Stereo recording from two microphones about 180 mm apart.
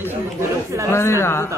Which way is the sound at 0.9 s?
15° left (ahead or behind).